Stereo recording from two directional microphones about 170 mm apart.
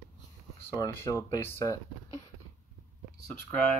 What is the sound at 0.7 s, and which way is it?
Speech, 15° left (ahead or behind).